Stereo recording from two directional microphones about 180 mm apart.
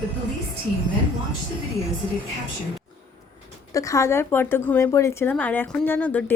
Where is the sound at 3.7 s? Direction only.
15° left (ahead or behind).